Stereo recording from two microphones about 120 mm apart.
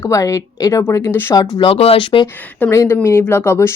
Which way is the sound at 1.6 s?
55° left (ahead or behind).